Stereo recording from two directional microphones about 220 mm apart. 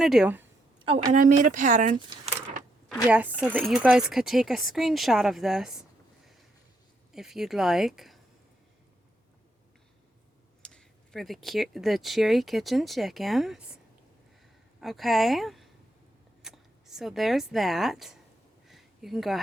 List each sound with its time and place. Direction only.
0.0 s speech: centre (ahead or behind)
1.1 s a woman's voice: 35° right (ahead or behind)
2.0 s speech: 20° right (ahead or behind)
3.1 s speech: 5° right (ahead or behind)
7.1 s speech: centre (ahead or behind)
10.6 s speech: 5° left (ahead or behind)
14.8 s speech: centre (ahead or behind)
18.7 s a sound: centre (ahead or behind)